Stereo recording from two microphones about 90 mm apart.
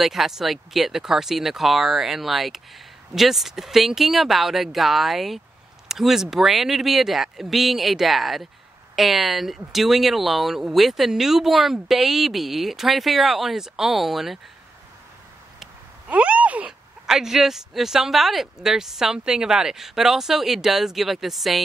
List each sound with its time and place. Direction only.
0.0 s speech: centre (ahead or behind)
16.1 s speech: 15° right (ahead or behind)
17.0 s speech: 5° right (ahead or behind)